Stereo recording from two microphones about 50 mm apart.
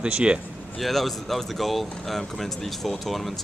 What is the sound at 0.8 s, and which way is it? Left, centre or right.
Speech, centre.